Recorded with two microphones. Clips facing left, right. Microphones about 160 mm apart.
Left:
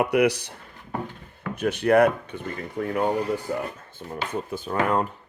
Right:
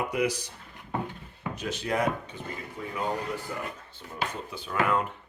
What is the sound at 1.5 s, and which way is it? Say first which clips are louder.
Speech: left 11 dB; 60° left (ahead or behind).